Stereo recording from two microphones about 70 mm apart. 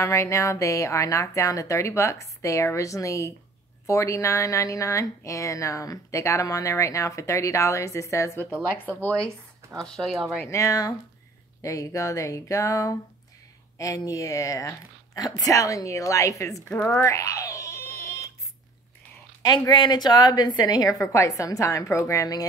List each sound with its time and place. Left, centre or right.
0.0 s speech: left
9.8 s speech: centre
10.5 s speech: left
16.9 s a sound: left
19.7 s a woman's voice: left
21.0 s speech: left